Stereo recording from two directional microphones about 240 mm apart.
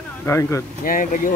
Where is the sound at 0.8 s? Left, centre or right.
Left.